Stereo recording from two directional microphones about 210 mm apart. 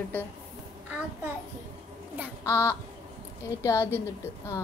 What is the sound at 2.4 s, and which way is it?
A woman's voice, 10° left (ahead or behind).